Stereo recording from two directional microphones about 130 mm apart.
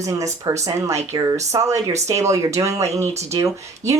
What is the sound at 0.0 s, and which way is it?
Speech, 25° right (ahead or behind).